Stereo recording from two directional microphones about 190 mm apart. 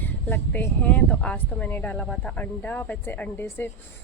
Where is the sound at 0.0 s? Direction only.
10° left (ahead or behind).